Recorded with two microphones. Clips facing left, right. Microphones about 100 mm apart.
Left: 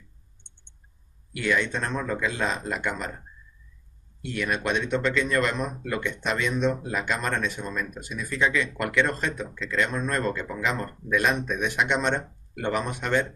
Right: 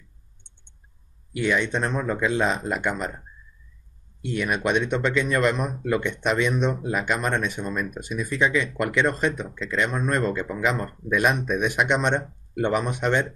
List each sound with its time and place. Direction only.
1.3 s speech: 20° right (ahead or behind)
4.2 s speech: 15° right (ahead or behind)